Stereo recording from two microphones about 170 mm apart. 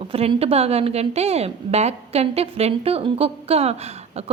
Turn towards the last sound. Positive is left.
turn(degrees=-35)  # may be behind; listen again after turning